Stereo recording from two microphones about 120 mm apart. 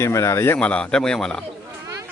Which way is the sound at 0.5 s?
10° left (ahead or behind).